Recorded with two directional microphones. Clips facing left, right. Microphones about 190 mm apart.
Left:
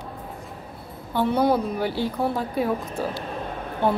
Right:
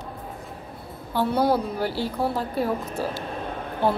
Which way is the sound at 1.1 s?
5° right (ahead or behind).